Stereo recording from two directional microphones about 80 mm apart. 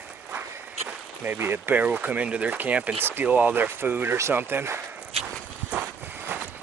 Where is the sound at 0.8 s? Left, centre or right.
Right.